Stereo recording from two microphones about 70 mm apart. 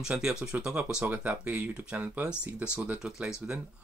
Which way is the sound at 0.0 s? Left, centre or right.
Centre.